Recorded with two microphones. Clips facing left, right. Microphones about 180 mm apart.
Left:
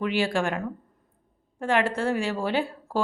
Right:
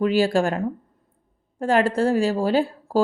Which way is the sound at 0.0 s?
35° right (ahead or behind).